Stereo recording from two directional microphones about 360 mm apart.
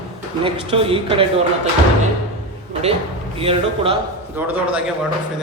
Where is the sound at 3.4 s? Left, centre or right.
Centre.